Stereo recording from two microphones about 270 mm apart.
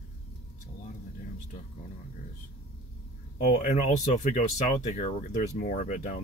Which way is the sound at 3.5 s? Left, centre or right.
Left.